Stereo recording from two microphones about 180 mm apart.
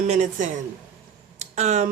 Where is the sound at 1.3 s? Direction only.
40° right (ahead or behind).